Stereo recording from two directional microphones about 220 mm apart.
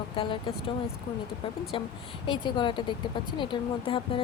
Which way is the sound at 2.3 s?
20° left (ahead or behind).